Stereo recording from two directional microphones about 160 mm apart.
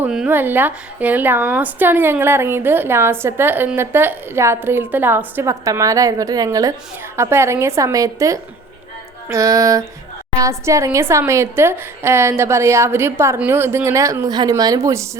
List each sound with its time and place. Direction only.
0.0 s a woman's voice: 5° right (ahead or behind)
9.3 s a sound: 20° right (ahead or behind)
10.3 s a woman's voice: 20° right (ahead or behind)